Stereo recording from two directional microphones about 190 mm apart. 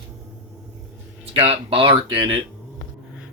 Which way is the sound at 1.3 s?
30° right (ahead or behind).